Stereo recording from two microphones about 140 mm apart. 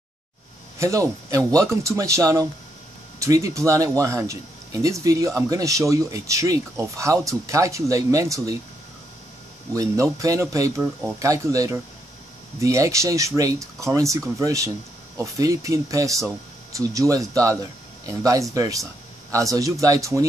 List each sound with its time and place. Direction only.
0.7 s a man's voice: 20° right (ahead or behind)
9.8 s a man's voice: 25° right (ahead or behind)